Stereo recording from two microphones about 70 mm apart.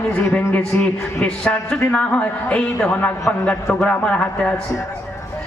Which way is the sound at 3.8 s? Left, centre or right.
Centre.